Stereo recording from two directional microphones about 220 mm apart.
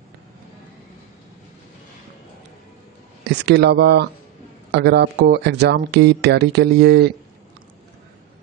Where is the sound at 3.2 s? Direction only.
50° right (ahead or behind).